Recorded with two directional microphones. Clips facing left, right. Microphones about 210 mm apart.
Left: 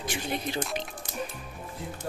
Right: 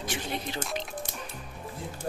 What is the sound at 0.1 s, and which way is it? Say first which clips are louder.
Speech: left 3 dB; 15° left (ahead or behind).